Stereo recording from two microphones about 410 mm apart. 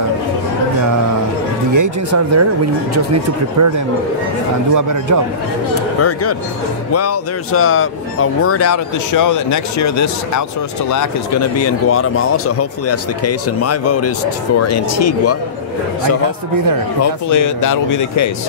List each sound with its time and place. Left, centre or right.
1.7 s speech: right
5.9 s speech: left
11.6 s speech: left
17.0 s speech: left